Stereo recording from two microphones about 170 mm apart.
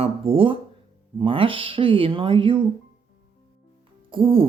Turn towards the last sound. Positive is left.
turn(degrees=-30)  # may be behind; listen again after turning